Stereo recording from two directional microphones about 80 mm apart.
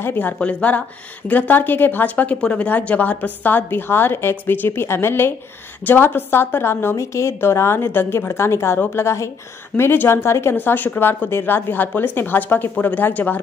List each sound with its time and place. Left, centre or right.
0.0 s a woman's voice: left